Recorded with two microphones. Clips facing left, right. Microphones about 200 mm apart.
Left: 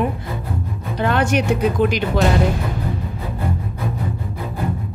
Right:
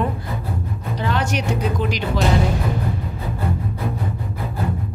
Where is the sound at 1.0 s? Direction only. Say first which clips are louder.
Left 5 dB; 55° left (ahead or behind).